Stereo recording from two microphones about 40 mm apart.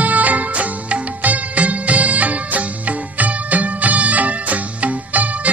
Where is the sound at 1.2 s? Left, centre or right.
Right.